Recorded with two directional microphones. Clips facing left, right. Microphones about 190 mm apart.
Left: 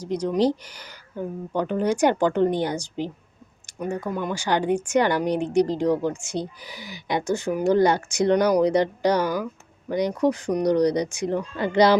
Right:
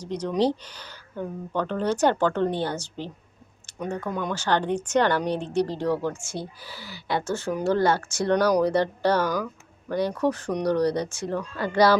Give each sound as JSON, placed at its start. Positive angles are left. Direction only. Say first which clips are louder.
{"t": 0.0, "sound": "speech", "louder": "left 2 dB", "side_deg": 10}